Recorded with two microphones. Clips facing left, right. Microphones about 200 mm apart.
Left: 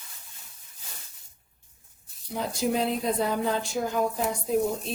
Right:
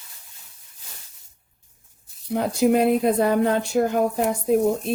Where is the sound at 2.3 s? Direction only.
60° right (ahead or behind).